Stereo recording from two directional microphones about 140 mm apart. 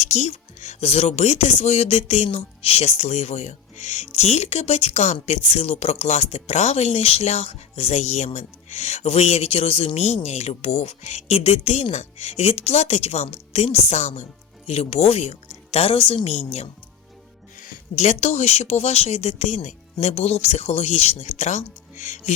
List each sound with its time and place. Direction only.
0.0 s speech: 55° left (ahead or behind)